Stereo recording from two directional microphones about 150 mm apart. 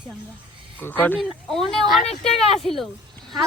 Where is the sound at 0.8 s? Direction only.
10° left (ahead or behind).